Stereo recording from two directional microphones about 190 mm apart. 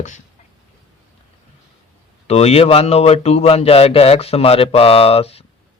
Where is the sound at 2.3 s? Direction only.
35° left (ahead or behind).